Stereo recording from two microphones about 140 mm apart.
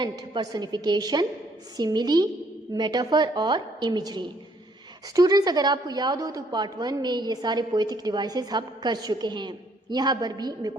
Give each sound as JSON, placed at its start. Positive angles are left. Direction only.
{"t": 0.0, "sound": "a woman's voice", "side_deg": -30}